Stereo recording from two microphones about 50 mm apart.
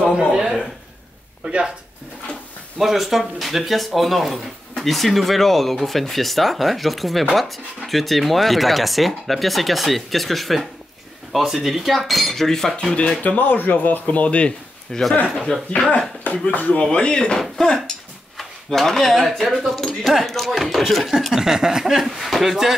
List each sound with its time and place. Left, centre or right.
0.3 s a sound: centre
1.4 s speech: centre
2.8 s speech: centre
12.9 s speech: left
14.9 s a man's voice: centre
16.3 s speech: left
16.8 s speech: centre